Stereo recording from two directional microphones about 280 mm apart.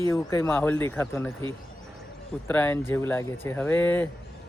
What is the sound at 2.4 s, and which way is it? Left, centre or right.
Speech, centre.